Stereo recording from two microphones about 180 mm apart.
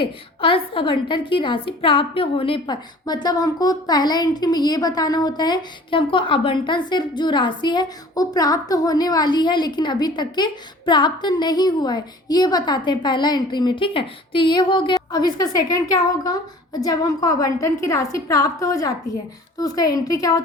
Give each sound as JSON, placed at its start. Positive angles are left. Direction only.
{"t": 0.0, "sound": "a woman's voice", "side_deg": 30}